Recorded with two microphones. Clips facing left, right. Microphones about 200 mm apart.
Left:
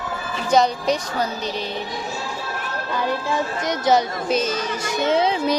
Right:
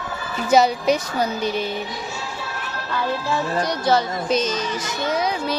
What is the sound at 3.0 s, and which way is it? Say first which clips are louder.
Speech: even; 20° left (ahead or behind).